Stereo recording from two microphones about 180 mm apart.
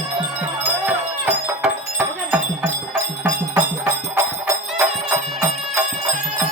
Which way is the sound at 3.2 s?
15° right (ahead or behind).